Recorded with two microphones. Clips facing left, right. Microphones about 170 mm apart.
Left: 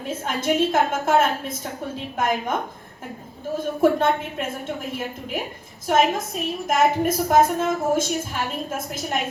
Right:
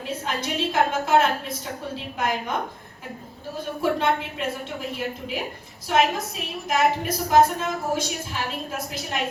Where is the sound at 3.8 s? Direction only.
50° left (ahead or behind).